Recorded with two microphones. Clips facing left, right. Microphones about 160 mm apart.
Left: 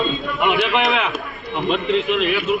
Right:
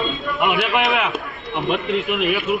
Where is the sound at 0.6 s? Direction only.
5° right (ahead or behind).